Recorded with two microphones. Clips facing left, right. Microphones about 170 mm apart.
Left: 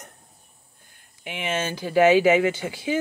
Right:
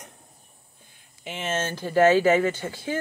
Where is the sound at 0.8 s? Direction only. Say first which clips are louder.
Even; 60° left (ahead or behind).